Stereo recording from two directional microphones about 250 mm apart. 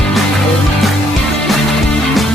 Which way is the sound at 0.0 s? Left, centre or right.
Centre.